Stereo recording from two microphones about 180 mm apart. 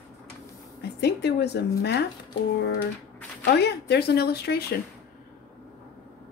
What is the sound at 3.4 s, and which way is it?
Speech, 65° left (ahead or behind).